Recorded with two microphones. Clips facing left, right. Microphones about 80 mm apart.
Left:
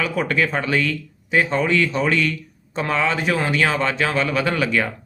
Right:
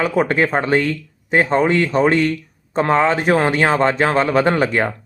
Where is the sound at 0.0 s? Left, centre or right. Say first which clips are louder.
Right 4 dB; right.